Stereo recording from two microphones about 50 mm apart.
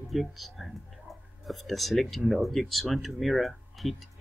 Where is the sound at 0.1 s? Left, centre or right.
Centre.